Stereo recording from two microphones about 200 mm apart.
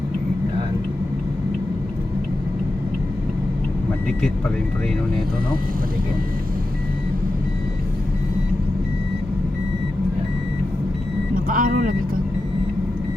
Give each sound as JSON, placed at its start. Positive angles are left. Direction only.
{"t": 11.4, "sound": "speech", "side_deg": -45}